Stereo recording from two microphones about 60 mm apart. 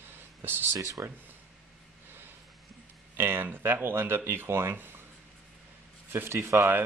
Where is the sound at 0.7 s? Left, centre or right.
Right.